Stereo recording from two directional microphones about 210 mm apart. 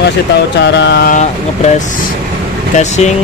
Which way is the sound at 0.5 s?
55° left (ahead or behind).